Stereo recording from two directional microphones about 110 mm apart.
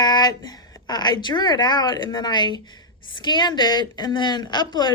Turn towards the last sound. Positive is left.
turn(degrees=40)  # may be behind; listen again after turning